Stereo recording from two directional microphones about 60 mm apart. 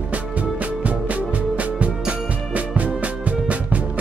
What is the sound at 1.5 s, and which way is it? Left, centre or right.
Music, right.